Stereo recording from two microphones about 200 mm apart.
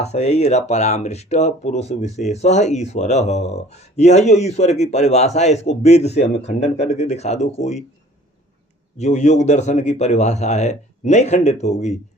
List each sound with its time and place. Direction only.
0.0 s speech: 35° left (ahead or behind)
9.0 s speech: 35° left (ahead or behind)